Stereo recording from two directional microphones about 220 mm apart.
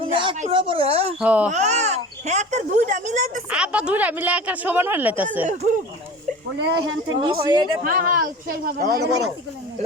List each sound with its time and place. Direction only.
0.0 s speech: 25° right (ahead or behind)
1.2 s a woman's voice: 5° right (ahead or behind)
1.5 s speech: 30° right (ahead or behind)
3.5 s a woman's voice: 5° right (ahead or behind)
6.7 s speech: 65° right (ahead or behind)
7.2 s speech: 20° right (ahead or behind)
7.9 s speech: 40° right (ahead or behind)